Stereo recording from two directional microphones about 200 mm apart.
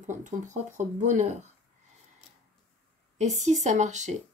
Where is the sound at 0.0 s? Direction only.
40° right (ahead or behind).